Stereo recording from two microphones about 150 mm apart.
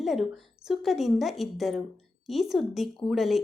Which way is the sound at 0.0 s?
Centre (ahead or behind).